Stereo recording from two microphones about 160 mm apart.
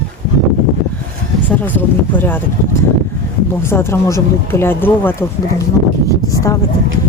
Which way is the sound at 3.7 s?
15° left (ahead or behind).